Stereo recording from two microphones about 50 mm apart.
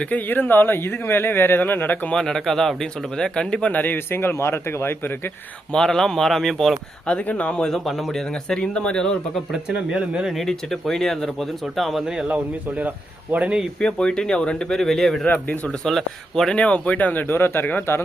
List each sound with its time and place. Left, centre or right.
0.1 s speech: left
2.1 s speech: centre
3.7 s speech: left
3.9 s speech: left
5.7 s speech: centre
7.1 s speech: left
7.5 s speech: centre
9.5 s speech: centre
10.4 s speech: centre
13.8 s speech: centre
15.3 s speech: left
15.8 s speech: centre
16.6 s speech: left